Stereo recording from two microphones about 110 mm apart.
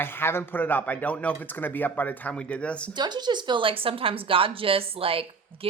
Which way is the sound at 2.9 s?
40° right (ahead or behind).